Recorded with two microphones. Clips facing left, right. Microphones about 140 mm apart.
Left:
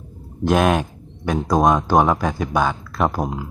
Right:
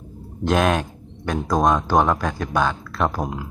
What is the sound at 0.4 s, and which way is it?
A man's voice, 10° left (ahead or behind).